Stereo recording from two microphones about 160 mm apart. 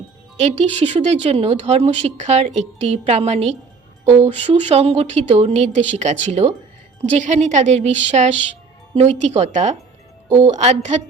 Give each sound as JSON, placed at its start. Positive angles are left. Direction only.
{"t": 0.3, "sound": "a woman's voice", "side_deg": -40}